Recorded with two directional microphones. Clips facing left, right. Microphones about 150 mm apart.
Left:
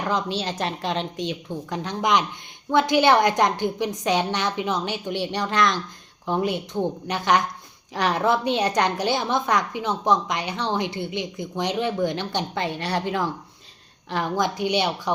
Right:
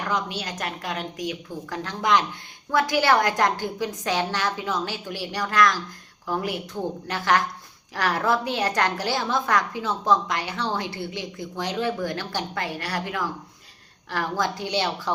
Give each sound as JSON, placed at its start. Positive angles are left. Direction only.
{"t": 0.0, "sound": "a woman's voice", "side_deg": 30}